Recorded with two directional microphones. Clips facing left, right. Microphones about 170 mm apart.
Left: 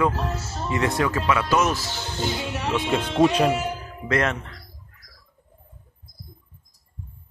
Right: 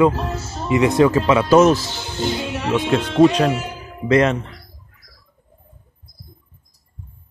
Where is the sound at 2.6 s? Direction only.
Centre (ahead or behind).